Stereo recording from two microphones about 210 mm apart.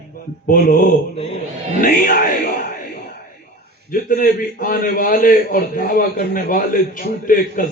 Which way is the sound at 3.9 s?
40° left (ahead or behind).